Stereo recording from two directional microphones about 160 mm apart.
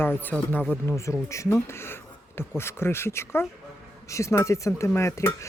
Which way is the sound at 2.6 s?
15° left (ahead or behind).